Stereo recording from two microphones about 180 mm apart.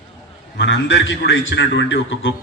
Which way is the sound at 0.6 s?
85° left.